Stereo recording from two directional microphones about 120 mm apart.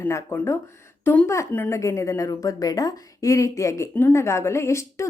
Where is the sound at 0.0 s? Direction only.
20° left (ahead or behind).